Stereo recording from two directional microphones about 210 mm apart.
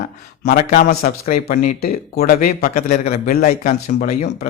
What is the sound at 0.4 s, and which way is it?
A man's voice, 40° left (ahead or behind).